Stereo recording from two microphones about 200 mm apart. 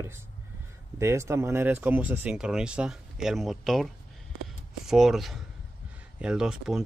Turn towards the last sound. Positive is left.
turn(degrees=-5)  # may be behind; listen again after turning